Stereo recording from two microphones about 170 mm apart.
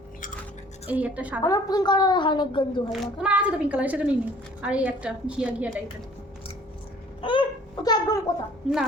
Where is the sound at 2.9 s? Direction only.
5° right (ahead or behind).